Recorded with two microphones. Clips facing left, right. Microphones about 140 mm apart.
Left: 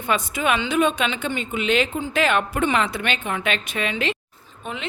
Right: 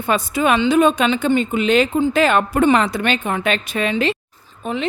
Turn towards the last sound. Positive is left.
turn(degrees=-35)  # may be behind; listen again after turning